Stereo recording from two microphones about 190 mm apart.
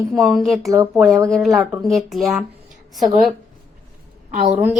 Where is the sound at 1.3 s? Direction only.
Centre (ahead or behind).